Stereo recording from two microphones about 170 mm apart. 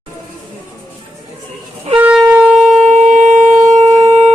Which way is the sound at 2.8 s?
45° right (ahead or behind).